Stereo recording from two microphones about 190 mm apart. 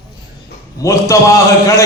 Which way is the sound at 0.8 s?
15° left (ahead or behind).